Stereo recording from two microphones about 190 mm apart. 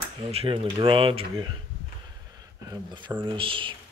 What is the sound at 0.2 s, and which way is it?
A man's voice, 30° right (ahead or behind).